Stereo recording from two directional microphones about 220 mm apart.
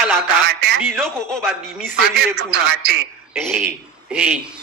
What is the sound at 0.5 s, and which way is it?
Speech, 50° right (ahead or behind).